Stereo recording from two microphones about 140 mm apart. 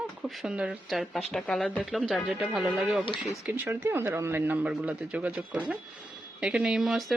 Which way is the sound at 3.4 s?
15° right (ahead or behind).